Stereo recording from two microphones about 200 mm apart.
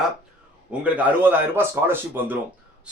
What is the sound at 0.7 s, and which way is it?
A man's voice, 10° right (ahead or behind).